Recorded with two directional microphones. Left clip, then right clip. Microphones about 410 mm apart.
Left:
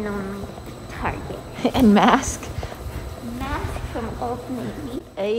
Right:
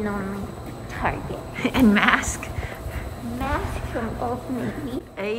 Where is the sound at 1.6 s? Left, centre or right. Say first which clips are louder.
Left 3 dB; centre.